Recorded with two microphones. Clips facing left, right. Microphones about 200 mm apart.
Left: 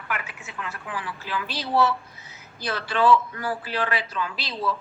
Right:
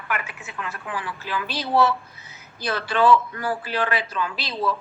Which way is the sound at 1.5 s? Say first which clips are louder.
Right 2 dB; 50° right (ahead or behind).